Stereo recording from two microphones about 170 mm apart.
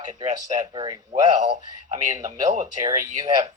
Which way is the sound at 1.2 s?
45° right (ahead or behind).